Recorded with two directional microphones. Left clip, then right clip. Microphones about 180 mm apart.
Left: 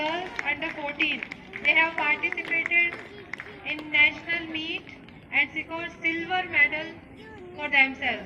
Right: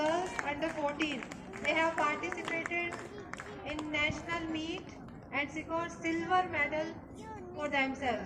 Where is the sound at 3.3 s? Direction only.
65° right (ahead or behind).